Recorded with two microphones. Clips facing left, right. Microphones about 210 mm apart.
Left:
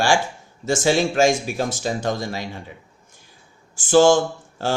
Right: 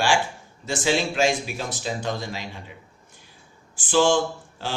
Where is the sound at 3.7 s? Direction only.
45° left (ahead or behind).